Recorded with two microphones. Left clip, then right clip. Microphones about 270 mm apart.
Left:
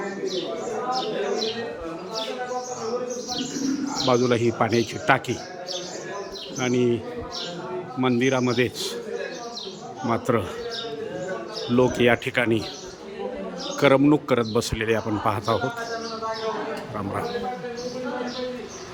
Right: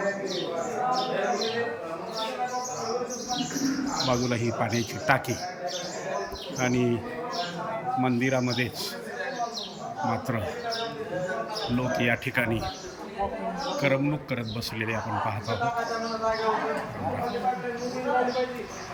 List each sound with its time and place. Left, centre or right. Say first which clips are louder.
4.1 s a man's voice: left 11 dB; centre
6.6 s speech: left 4 dB; centre
8.0 s a man's voice: left 8 dB; centre
10.1 s a man's voice: left 8 dB; centre
11.8 s a man's voice: left 8 dB; centre
13.8 s a man's voice: left 10 dB; centre